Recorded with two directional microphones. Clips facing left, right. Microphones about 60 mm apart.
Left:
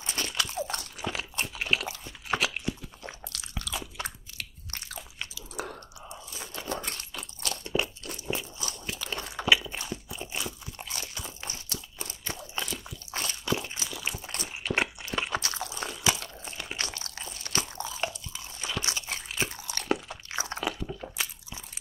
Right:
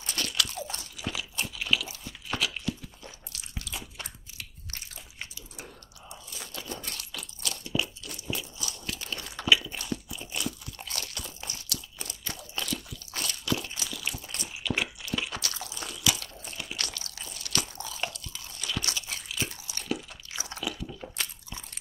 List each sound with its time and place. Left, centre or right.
0.0 s crunch: left
0.7 s crunch: left
3.3 s biting: left
6.7 s crunch: left
8.8 s a sound: left
9.5 s crunch: left
14.2 s crunch: left
19.0 s biting: left
19.7 s crunch: left
20.2 s chewing: left